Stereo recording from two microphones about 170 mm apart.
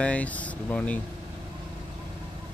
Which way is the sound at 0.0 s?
10° left (ahead or behind).